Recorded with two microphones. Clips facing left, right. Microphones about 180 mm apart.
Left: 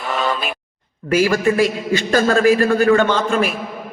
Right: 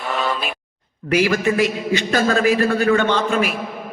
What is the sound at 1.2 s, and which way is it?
A man's voice, 45° left (ahead or behind).